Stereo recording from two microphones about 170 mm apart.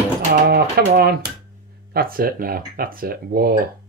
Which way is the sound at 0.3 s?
65° right (ahead or behind).